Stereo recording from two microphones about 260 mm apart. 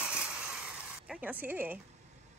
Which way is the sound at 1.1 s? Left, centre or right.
Centre.